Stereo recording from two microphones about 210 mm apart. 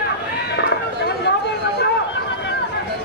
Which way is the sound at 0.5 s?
55° left (ahead or behind).